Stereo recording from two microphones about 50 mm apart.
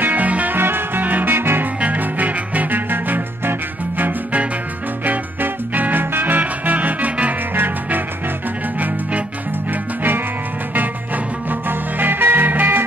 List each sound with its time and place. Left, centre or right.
0.0 s music: right
0.6 s music: right
1.8 s music: right
7.5 s music: right
11.7 s music: right